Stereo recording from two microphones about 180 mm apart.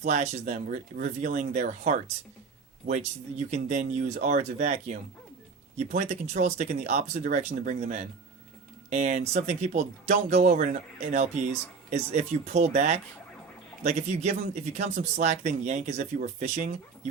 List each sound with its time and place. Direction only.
0.0 s speech: 40° right (ahead or behind)